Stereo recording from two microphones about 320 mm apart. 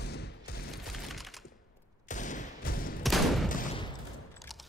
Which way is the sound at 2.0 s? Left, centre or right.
Left.